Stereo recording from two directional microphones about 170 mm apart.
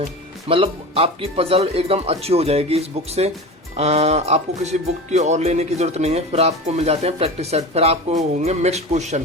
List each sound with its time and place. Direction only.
0.4 s speech: 35° right (ahead or behind)